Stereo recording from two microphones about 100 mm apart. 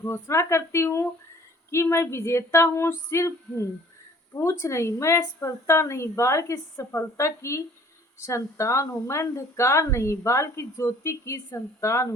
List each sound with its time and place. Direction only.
0.0 s speech: 25° left (ahead or behind)